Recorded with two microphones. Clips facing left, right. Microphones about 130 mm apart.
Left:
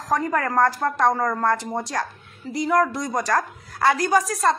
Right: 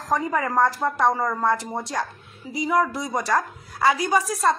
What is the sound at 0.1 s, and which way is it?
A woman's voice, centre (ahead or behind).